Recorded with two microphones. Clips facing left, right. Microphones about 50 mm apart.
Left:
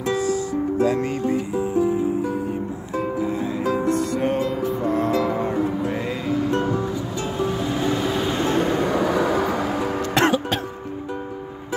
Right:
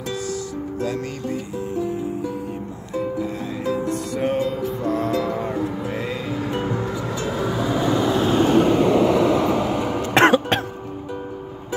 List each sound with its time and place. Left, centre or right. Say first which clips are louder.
0.1 s music: left 6 dB; left
3.8 s music: left 2 dB; centre
10.1 s music: right 5 dB; right